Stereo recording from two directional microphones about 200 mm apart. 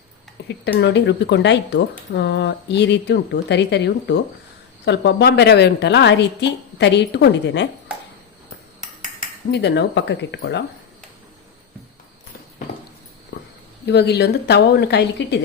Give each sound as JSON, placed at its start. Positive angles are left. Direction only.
{"t": 0.4, "sound": "speech", "side_deg": 60}
{"t": 9.5, "sound": "speech", "side_deg": 60}
{"t": 13.3, "sound": "a sound", "side_deg": 60}
{"t": 13.8, "sound": "speech", "side_deg": 55}